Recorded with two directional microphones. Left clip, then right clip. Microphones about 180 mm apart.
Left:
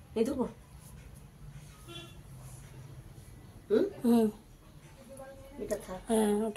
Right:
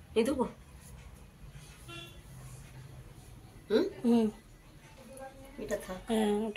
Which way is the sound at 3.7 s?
10° left (ahead or behind).